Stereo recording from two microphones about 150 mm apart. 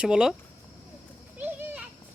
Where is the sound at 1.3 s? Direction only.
10° right (ahead or behind).